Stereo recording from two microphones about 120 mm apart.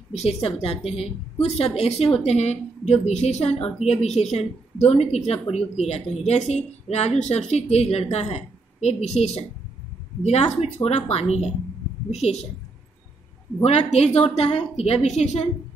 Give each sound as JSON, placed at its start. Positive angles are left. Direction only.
{"t": 0.1, "sound": "a woman's voice", "side_deg": 60}
{"t": 13.6, "sound": "a woman's voice", "side_deg": 60}
{"t": 15.0, "sound": "a woman's voice", "side_deg": 65}